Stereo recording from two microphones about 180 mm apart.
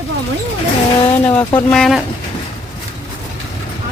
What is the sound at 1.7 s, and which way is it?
Speech, centre (ahead or behind).